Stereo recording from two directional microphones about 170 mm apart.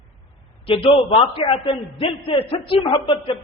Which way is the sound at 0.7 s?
35° left (ahead or behind).